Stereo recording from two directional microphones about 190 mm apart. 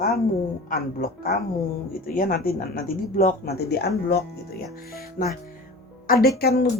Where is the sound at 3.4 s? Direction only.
60° left (ahead or behind).